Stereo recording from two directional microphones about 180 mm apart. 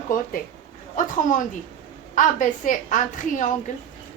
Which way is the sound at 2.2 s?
45° left (ahead or behind).